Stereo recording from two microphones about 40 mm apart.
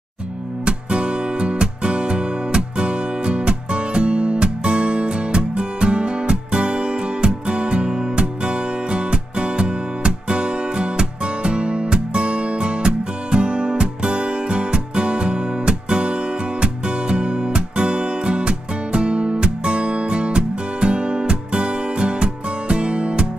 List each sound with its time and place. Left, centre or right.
0.7 s music: right